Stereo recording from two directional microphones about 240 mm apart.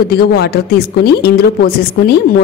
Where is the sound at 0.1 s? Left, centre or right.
Left.